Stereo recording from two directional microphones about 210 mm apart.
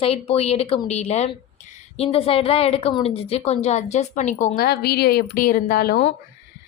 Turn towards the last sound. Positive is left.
turn(degrees=45)  # may be behind; listen again after turning